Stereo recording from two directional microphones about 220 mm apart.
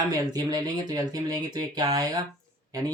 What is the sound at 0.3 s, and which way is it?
Speech, 15° right (ahead or behind).